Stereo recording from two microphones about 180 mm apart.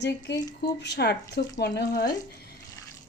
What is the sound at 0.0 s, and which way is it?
A woman's voice, 70° left (ahead or behind).